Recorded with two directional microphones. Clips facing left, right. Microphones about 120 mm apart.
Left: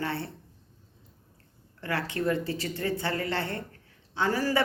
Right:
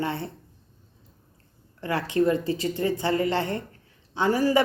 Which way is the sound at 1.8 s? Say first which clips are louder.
Right 6 dB; 15° right (ahead or behind).